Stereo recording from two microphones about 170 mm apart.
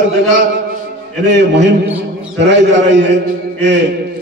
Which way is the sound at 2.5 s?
90° right.